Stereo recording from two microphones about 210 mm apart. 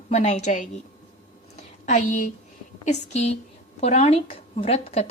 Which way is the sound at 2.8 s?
35° left (ahead or behind).